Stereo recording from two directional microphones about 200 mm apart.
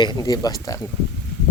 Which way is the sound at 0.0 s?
20° left (ahead or behind).